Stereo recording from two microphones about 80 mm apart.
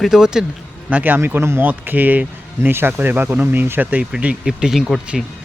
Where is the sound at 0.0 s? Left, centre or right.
Centre.